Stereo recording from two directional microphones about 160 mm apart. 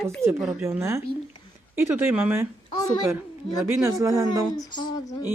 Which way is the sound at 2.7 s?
25° left (ahead or behind).